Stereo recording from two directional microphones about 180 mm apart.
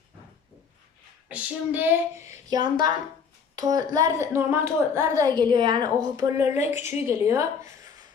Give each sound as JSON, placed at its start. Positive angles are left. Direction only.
{"t": 1.3, "sound": "a woman's voice", "side_deg": -10}
{"t": 6.7, "sound": "a woman's voice", "side_deg": 35}
{"t": 7.0, "sound": "speech", "side_deg": -15}